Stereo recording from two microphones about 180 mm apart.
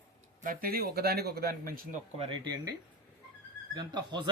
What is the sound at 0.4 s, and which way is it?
A man's voice, 50° right (ahead or behind).